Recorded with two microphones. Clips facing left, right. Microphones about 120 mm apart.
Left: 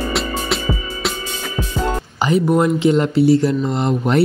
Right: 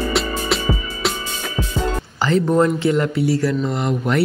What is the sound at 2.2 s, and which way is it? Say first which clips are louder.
Speech: left 1 dB; 10° left (ahead or behind).